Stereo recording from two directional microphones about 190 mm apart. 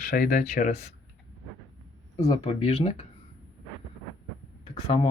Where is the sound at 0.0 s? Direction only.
45° left (ahead or behind).